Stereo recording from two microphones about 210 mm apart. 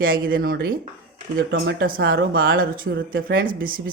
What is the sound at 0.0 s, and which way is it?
Speech, 45° right (ahead or behind).